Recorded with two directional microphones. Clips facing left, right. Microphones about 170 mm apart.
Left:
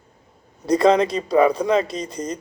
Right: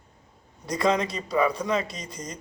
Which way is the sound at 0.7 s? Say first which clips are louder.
Left 8 dB; 30° left (ahead or behind).